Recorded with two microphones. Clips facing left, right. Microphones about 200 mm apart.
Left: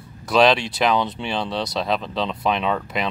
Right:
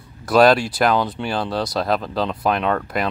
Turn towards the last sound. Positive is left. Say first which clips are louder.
# right 2 dB
turn(degrees=0)  # may be behind; listen again after turning